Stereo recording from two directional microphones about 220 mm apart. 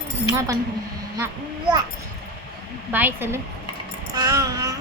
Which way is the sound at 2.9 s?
10° right (ahead or behind).